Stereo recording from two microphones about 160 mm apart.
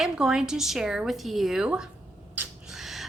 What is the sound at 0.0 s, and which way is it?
A woman's voice, 5° right (ahead or behind).